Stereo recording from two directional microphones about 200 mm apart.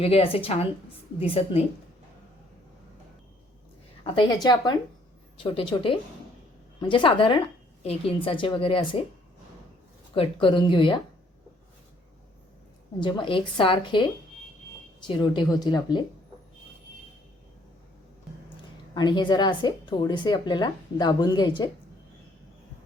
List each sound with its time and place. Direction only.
0.0 s a woman's voice: 30° left (ahead or behind)
4.0 s a woman's voice: 25° left (ahead or behind)
10.2 s a woman's voice: 25° left (ahead or behind)
13.0 s a woman's voice: 25° left (ahead or behind)
18.9 s a woman's voice: 20° left (ahead or behind)